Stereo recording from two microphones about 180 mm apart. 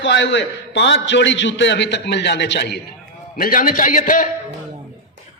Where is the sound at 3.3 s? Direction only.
50° left (ahead or behind).